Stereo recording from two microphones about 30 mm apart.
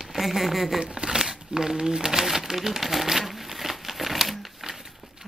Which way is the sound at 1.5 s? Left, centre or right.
Right.